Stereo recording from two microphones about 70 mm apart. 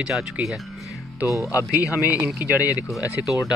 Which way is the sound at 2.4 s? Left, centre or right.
Right.